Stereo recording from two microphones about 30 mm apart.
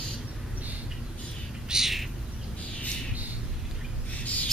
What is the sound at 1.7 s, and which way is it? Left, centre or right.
Bird, centre.